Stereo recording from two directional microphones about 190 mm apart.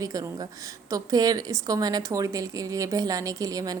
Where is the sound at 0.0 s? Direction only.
20° right (ahead or behind).